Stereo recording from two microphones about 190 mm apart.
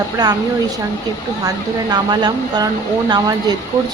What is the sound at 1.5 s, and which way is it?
Speech, 20° right (ahead or behind).